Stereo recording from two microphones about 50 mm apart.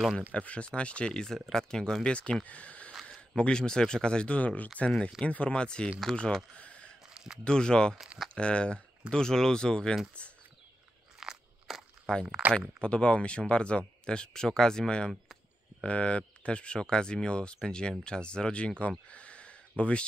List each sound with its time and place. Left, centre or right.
0.3 s speech: left
4.8 s speech: centre
6.1 s speech: centre
6.5 s a sound: left
7.4 s speech: centre
11.1 s walk: centre
12.1 s speech: centre
18.8 s a sound: left
19.8 s speech: left